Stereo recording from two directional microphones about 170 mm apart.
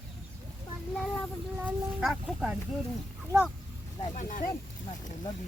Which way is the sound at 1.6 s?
5° right (ahead or behind).